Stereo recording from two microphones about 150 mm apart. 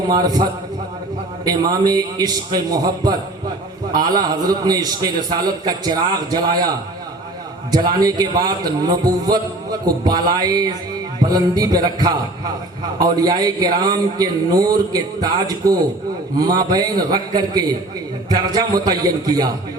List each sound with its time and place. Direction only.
0.1 s a man's voice: 25° right (ahead or behind)
7.7 s a man's voice: 25° right (ahead or behind)